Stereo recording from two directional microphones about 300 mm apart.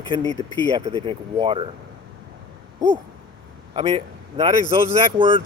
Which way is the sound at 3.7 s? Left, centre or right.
Centre.